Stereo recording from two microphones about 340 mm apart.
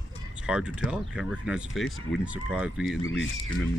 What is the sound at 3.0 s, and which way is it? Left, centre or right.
Speech, left.